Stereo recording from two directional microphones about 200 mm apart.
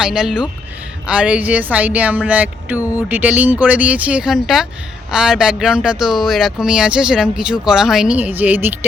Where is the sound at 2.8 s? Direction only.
15° left (ahead or behind).